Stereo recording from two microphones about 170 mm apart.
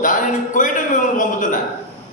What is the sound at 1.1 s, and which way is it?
Speech, 50° left (ahead or behind).